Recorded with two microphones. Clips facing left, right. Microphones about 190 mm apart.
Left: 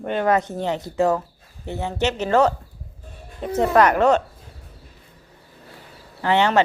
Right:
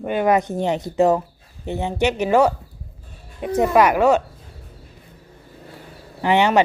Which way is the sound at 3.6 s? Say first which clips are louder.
Right 1 dB; 10° right (ahead or behind).